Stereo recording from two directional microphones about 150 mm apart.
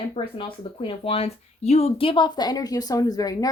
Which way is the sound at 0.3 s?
35° left (ahead or behind).